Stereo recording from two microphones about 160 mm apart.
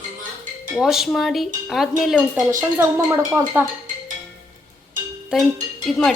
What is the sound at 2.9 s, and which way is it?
Speech, 20° right (ahead or behind).